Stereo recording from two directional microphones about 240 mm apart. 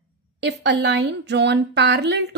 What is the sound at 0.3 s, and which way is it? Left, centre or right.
A woman's voice, right.